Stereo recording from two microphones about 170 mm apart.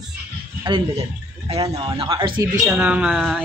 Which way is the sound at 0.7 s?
30° right (ahead or behind).